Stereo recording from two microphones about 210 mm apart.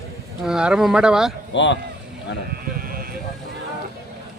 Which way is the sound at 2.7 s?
45° right (ahead or behind).